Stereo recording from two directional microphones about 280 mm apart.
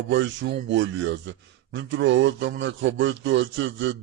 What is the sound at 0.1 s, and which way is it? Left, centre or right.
A man's voice, right.